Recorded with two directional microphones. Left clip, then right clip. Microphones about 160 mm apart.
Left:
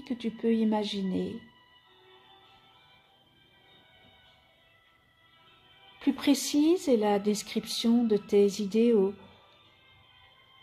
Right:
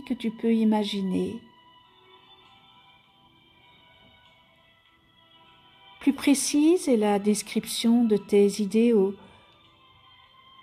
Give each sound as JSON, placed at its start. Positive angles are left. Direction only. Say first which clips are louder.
{"t": 0.0, "sound": "a woman's voice", "louder": "right 3 dB", "side_deg": -50}
{"t": 5.9, "sound": "a woman's voice", "louder": "right 4 dB", "side_deg": -55}